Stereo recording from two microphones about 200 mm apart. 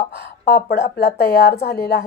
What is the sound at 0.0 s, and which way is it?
A woman's voice, 55° left (ahead or behind).